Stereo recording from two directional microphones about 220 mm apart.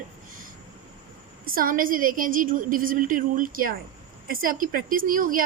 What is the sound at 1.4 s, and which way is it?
A woman's voice, 40° right (ahead or behind).